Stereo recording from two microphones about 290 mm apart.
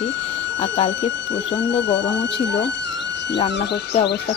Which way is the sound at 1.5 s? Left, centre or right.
Left.